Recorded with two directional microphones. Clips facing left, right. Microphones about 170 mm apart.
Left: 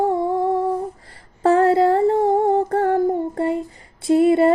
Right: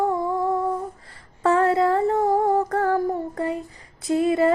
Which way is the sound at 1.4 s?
30° left (ahead or behind).